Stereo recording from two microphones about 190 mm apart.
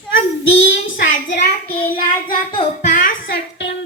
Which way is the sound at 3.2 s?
65° left (ahead or behind).